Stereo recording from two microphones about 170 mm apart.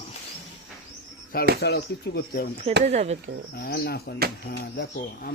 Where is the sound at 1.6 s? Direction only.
75° left (ahead or behind).